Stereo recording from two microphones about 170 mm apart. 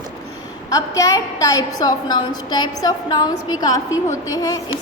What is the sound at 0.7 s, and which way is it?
A woman's voice, 20° left (ahead or behind).